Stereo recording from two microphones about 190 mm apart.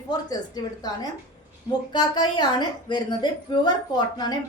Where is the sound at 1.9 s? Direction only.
20° left (ahead or behind).